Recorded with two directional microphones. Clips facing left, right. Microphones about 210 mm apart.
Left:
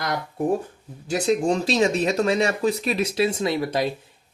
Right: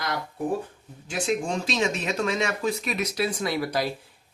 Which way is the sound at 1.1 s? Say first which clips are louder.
Left 6 dB; 40° left (ahead or behind).